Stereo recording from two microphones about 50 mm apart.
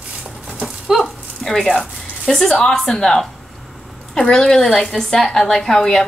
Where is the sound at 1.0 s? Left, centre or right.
Centre.